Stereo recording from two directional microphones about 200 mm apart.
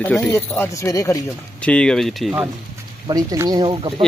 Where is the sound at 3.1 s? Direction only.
20° right (ahead or behind).